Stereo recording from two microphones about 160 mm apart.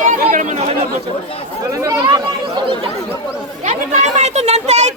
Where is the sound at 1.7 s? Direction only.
20° right (ahead or behind).